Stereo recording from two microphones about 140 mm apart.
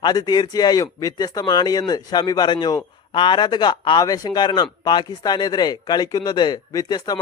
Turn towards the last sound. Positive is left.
turn(degrees=30)  # may be behind; listen again after turning